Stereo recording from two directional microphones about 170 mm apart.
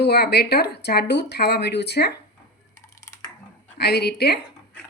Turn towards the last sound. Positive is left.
turn(degrees=70)  # may be behind; listen again after turning